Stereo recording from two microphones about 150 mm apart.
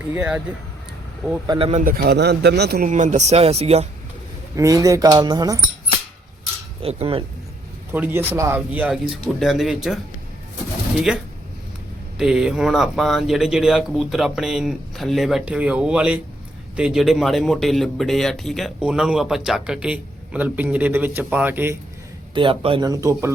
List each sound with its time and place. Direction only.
0.1 s speech: 10° right (ahead or behind)
1.5 s speech: 40° right (ahead or behind)
1.8 s speech: 80° right
2.9 s speech: 50° right (ahead or behind)
4.5 s speech: 20° right (ahead or behind)
6.8 s speech: 40° right (ahead or behind)
7.9 s speech: 15° right (ahead or behind)
22.4 s speech: 35° right (ahead or behind)
22.9 s speech: 20° right (ahead or behind)